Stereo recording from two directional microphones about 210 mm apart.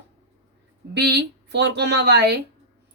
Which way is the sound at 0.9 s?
55° right (ahead or behind).